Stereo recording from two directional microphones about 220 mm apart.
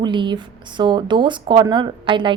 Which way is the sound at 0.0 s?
20° right (ahead or behind).